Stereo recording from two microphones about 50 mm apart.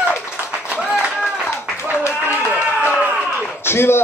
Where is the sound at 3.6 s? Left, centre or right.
Left.